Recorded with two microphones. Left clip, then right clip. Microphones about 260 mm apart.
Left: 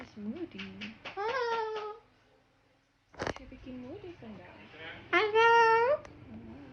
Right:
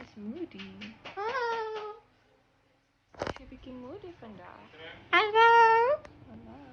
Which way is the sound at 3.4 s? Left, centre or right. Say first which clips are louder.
Right 1 dB; centre.